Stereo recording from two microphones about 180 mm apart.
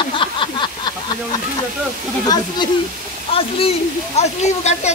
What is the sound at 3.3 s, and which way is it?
Speech, 30° left (ahead or behind).